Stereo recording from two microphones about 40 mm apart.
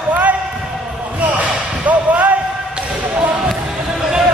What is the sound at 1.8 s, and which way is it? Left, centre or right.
Basketball bounce, right.